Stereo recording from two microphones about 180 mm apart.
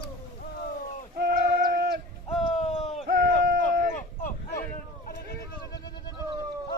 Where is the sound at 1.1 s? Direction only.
55° right (ahead or behind).